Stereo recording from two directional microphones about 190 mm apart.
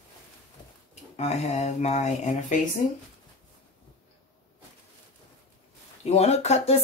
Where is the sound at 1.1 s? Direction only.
35° left (ahead or behind).